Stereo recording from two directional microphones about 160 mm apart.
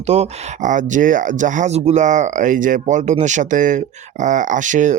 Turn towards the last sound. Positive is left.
turn(degrees=-50)  # may be behind; listen again after turning